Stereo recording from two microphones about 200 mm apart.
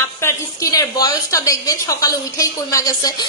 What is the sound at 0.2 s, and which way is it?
A woman's voice, 15° left (ahead or behind).